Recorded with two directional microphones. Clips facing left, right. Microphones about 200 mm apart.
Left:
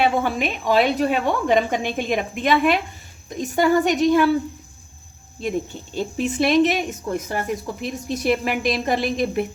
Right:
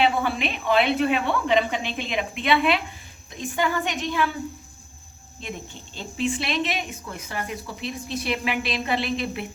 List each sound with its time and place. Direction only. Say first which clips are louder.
0.0 s a woman's voice: left 2 dB; 45° left (ahead or behind)
5.4 s speech: left 11 dB; 40° left (ahead or behind)